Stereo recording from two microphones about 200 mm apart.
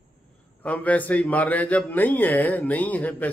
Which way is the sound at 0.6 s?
10° left (ahead or behind).